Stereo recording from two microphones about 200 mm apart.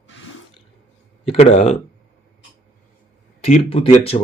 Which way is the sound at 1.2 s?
30° left (ahead or behind).